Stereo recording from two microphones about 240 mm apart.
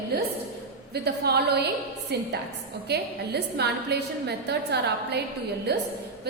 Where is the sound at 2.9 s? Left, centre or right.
Right.